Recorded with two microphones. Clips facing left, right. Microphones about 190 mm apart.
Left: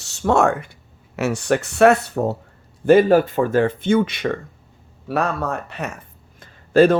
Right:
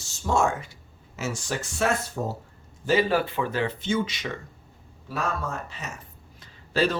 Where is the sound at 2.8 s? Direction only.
50° left (ahead or behind).